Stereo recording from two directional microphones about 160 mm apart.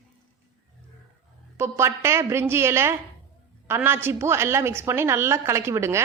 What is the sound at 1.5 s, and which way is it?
A woman's voice, 15° right (ahead or behind).